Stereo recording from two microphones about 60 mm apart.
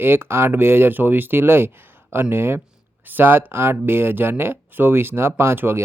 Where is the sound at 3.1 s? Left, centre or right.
Right.